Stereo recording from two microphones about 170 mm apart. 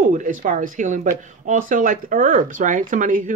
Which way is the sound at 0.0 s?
50° right (ahead or behind).